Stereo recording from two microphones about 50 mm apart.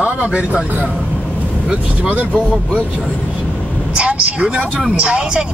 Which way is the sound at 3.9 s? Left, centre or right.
Right.